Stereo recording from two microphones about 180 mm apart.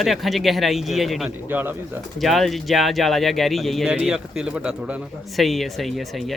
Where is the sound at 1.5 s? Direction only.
10° right (ahead or behind).